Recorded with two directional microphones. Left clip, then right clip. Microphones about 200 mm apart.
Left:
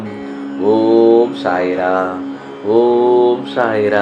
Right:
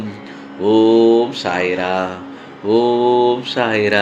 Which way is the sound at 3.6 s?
60° right (ahead or behind).